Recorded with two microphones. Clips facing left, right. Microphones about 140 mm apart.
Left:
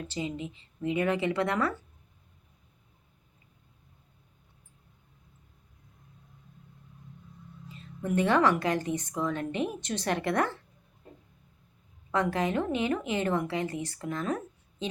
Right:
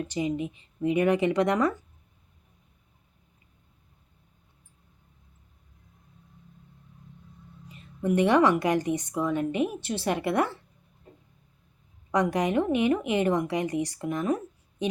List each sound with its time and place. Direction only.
0.1 s a woman's voice: 15° right (ahead or behind)
7.7 s a woman's voice: 15° right (ahead or behind)
12.1 s a woman's voice: 15° right (ahead or behind)